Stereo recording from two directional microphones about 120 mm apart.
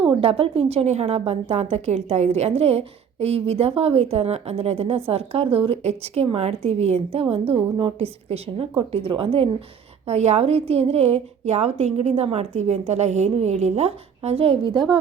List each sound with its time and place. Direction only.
0.0 s a woman's voice: 50° right (ahead or behind)
10.1 s a woman's voice: 65° right (ahead or behind); by 14.9 s 40° right (ahead or behind)